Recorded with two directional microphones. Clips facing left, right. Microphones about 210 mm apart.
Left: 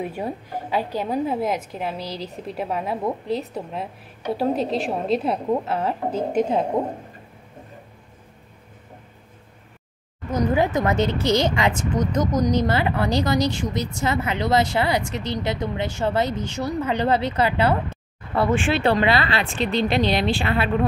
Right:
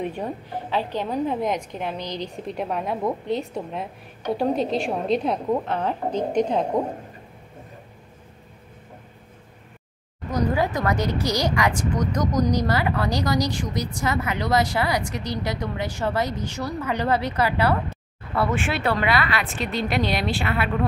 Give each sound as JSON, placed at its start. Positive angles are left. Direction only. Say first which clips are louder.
{"t": 0.0, "sound": "a woman's voice", "louder": "even", "side_deg": 10}
{"t": 10.5, "sound": "speech", "louder": "left 5 dB", "side_deg": 20}